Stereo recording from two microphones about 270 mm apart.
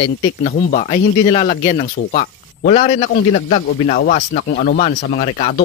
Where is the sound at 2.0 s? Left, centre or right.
Left.